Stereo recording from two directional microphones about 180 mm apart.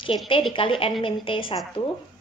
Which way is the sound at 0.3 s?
30° left (ahead or behind).